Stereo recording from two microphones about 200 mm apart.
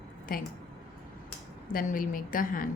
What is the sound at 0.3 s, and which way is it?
Speech, 45° left (ahead or behind).